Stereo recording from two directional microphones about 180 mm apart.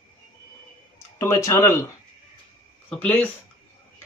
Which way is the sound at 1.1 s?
15° left (ahead or behind).